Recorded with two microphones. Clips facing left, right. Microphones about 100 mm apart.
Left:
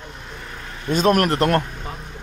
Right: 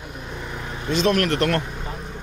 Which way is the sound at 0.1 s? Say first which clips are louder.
Right 3 dB; 15° right (ahead or behind).